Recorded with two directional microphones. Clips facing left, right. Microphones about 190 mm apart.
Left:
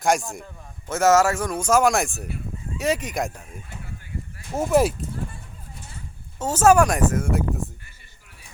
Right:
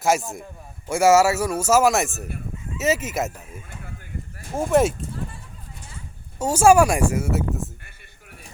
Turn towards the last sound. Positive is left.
turn(degrees=-5)  # may be behind; listen again after turning